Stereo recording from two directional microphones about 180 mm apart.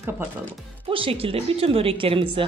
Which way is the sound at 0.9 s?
30° right (ahead or behind).